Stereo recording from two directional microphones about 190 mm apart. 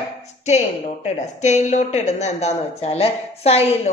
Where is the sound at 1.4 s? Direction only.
40° left (ahead or behind).